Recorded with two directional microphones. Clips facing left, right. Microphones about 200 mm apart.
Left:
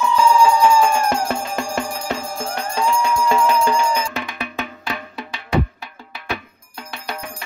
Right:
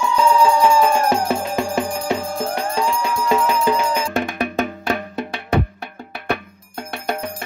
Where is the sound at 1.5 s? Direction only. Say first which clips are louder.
Right 3 dB; 15° right (ahead or behind).